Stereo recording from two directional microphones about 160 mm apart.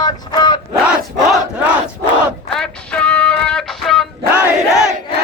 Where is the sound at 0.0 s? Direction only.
25° left (ahead or behind).